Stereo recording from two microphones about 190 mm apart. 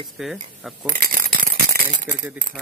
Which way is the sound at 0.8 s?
45° right (ahead or behind).